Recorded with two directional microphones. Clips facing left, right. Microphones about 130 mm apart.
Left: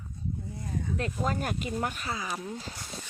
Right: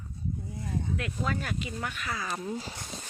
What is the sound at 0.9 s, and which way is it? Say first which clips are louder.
Speech: left 2 dB; 35° left (ahead or behind).